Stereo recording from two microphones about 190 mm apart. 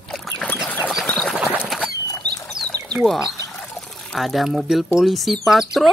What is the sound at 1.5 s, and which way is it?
Rodents, centre (ahead or behind).